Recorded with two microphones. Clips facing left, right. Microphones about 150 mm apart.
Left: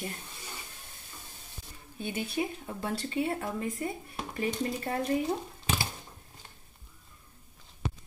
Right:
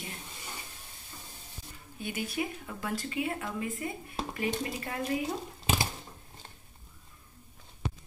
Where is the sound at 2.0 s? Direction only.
30° left (ahead or behind).